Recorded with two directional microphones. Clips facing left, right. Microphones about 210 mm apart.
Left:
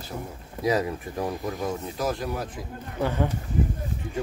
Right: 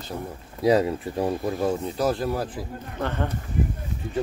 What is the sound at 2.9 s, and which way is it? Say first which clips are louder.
Speech: left 2 dB; 10° left (ahead or behind).